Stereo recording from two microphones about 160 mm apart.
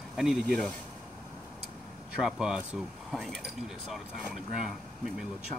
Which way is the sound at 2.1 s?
5° right (ahead or behind).